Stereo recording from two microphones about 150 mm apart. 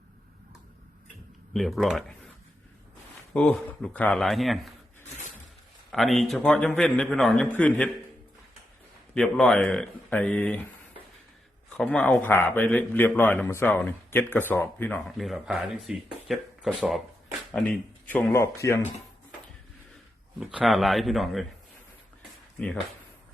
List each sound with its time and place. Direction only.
1.5 s a man's voice: centre (ahead or behind)
3.3 s a man's voice: 10° left (ahead or behind)
5.0 s a sound: 50° left (ahead or behind)
5.9 s a man's voice: centre (ahead or behind)
9.1 s a man's voice: 5° left (ahead or behind)
11.8 s speech: 5° left (ahead or behind)
17.5 s speech: 10° left (ahead or behind)
20.4 s a man's voice: 5° right (ahead or behind)
22.5 s speech: 5° left (ahead or behind)